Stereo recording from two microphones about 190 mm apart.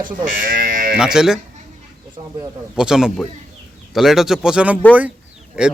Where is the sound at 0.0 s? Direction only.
45° right (ahead or behind).